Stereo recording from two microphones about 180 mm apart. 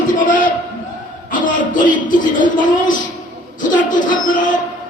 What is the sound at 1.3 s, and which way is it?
Music, 50° left (ahead or behind).